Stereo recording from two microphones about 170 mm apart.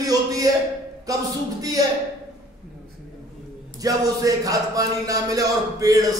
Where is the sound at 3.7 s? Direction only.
20° right (ahead or behind).